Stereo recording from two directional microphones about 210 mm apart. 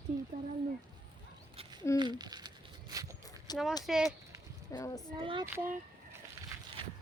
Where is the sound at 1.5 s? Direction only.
25° right (ahead or behind).